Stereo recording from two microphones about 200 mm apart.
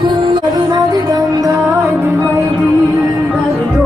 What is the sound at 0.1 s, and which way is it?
Music, 25° right (ahead or behind).